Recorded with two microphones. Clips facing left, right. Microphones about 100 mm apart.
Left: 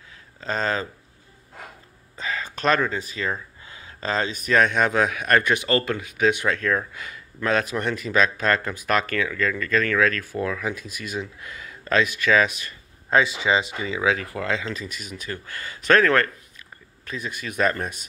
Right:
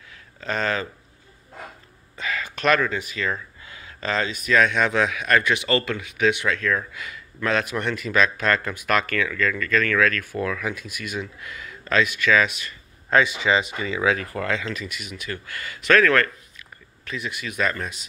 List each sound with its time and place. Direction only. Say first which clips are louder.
0.4 s speech: even; 30° left (ahead or behind)
2.1 s a man's voice: even; 30° left (ahead or behind)
13.8 s speech: right 1 dB; 15° left (ahead or behind)
14.6 s speech: right 1 dB; 30° left (ahead or behind)